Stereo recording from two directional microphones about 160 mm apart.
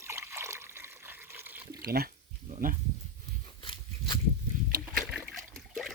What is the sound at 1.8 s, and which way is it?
Speech, 70° right (ahead or behind).